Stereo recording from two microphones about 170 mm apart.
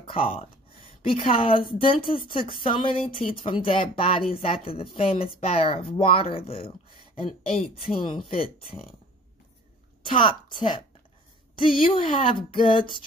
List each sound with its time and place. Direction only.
0.0 s a sound: 30° left (ahead or behind)
1.0 s speech: 30° left (ahead or behind)
10.0 s a woman's voice: 30° left (ahead or behind)